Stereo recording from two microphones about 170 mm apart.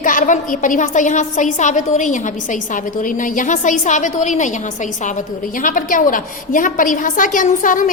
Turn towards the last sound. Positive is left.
turn(degrees=50)  # may be behind; listen again after turning